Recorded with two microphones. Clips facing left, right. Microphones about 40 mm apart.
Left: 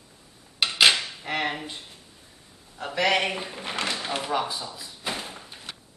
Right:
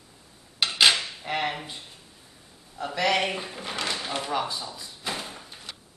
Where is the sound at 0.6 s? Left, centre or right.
Centre.